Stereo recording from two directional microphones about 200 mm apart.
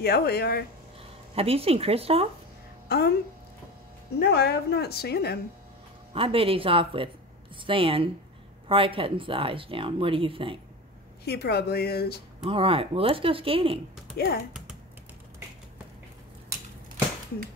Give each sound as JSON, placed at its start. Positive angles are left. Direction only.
{"t": 0.0, "sound": "a woman's voice", "side_deg": 50}
{"t": 1.3, "sound": "speech", "side_deg": -30}
{"t": 2.9, "sound": "a woman's voice", "side_deg": 55}
{"t": 4.2, "sound": "a woman's voice", "side_deg": 55}
{"t": 6.1, "sound": "speech", "side_deg": -30}
{"t": 11.2, "sound": "a woman's voice", "side_deg": 55}
{"t": 12.4, "sound": "speech", "side_deg": -25}
{"t": 14.1, "sound": "a woman's voice", "side_deg": 50}